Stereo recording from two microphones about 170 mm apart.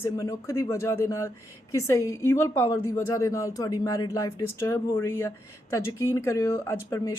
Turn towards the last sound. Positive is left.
turn(degrees=20)  # may be behind; listen again after turning